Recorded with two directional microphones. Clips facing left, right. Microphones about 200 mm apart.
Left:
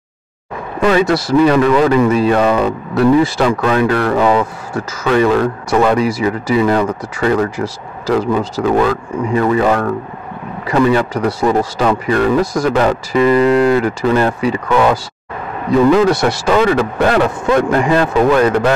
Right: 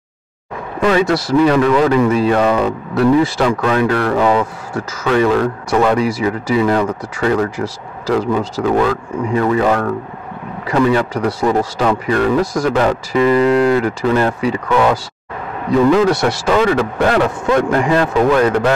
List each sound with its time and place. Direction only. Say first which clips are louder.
0.8 s a man's voice: left 1 dB; 10° left (ahead or behind)